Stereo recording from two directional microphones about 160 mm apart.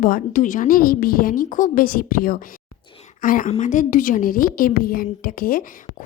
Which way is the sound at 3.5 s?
50° left (ahead or behind).